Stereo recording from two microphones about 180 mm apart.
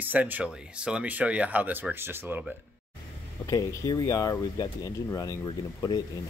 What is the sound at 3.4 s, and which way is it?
Speech, 20° left (ahead or behind).